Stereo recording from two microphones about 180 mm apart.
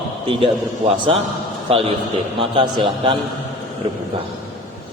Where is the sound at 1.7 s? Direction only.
30° right (ahead or behind).